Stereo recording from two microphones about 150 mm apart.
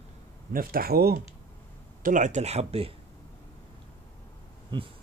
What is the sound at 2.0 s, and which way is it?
Speech, 60° right (ahead or behind).